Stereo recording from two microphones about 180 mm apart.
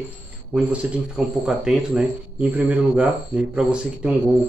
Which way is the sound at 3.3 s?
10° right (ahead or behind).